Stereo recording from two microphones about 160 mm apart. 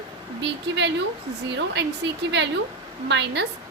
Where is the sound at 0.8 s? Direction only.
90° right.